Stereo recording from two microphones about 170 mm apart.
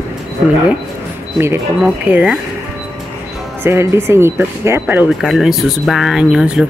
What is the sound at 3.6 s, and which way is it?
Speech, 15° right (ahead or behind).